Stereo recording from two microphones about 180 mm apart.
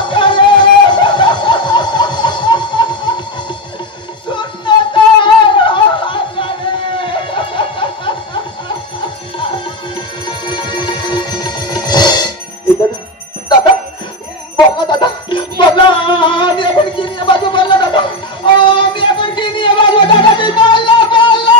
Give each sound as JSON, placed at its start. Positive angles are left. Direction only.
{"t": 0.0, "sound": "music", "side_deg": 25}
{"t": 4.3, "sound": "a sound", "side_deg": 25}
{"t": 9.4, "sound": "music", "side_deg": 25}
{"t": 14.8, "sound": "music", "side_deg": 25}